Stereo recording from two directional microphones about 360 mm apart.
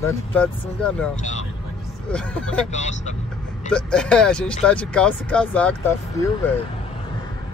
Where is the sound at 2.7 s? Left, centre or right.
Centre.